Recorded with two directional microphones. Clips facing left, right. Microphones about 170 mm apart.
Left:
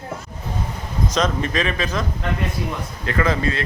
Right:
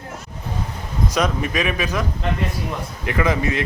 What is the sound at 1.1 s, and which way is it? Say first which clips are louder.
Speech: even; 10° right (ahead or behind).